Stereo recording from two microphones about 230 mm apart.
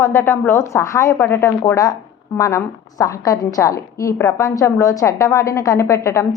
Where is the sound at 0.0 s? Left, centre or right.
Centre.